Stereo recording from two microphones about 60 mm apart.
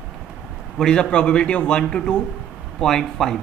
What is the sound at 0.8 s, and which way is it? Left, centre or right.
A man's voice, centre.